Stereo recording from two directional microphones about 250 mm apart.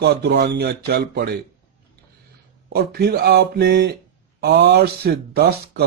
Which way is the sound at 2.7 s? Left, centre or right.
Right.